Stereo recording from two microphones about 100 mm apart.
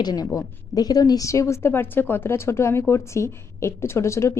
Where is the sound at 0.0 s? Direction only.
40° left (ahead or behind).